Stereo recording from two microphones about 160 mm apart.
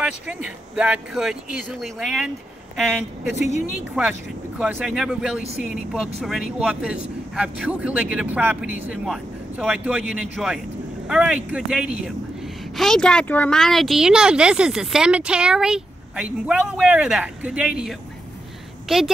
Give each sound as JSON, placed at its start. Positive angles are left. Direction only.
{"t": 0.0, "sound": "speech", "side_deg": -5}
{"t": 3.3, "sound": "speech", "side_deg": 45}
{"t": 4.6, "sound": "speech", "side_deg": -5}